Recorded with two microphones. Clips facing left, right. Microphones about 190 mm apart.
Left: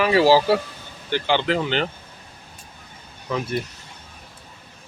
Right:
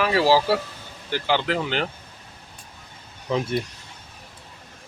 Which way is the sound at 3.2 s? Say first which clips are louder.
Right 1 dB; 25° right (ahead or behind).